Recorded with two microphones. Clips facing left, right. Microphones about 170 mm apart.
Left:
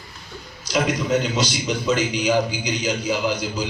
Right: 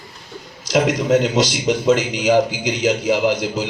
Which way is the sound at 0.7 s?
90° right.